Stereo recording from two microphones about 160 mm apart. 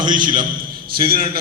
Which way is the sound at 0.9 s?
65° right (ahead or behind).